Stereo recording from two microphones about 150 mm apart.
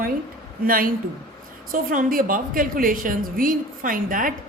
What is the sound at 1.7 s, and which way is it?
A woman's voice, 65° right (ahead or behind).